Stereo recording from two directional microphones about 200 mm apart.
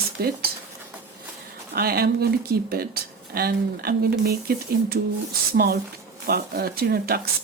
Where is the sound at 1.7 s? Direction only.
50° right (ahead or behind).